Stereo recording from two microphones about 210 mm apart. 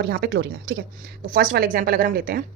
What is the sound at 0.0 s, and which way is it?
A woman's voice, 50° right (ahead or behind).